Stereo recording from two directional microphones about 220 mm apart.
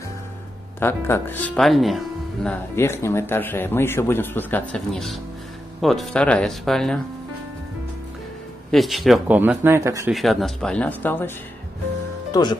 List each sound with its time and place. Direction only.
0.7 s speech: 10° left (ahead or behind)
8.7 s speech: centre (ahead or behind)
10.1 s speech: centre (ahead or behind); by 12.5 s 20° left (ahead or behind)